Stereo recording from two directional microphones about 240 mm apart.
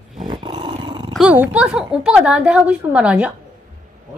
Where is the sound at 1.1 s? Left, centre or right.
Centre.